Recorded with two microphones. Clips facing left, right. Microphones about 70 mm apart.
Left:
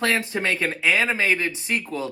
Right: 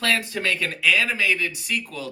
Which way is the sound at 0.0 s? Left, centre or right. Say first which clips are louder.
Left 1 dB; left.